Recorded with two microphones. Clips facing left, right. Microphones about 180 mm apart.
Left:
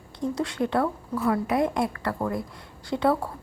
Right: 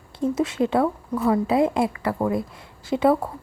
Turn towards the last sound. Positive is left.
turn(degrees=-20)  # may be behind; listen again after turning